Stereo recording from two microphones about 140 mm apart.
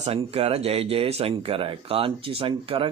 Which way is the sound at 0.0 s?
45° right (ahead or behind).